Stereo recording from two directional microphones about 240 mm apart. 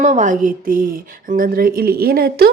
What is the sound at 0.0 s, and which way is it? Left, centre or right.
Speech, right.